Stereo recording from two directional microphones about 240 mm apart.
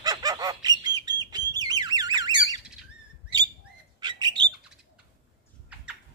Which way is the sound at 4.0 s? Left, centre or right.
Centre.